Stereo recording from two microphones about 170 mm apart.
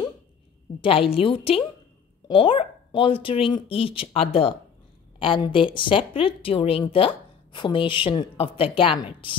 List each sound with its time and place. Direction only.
0.7 s speech: 30° left (ahead or behind)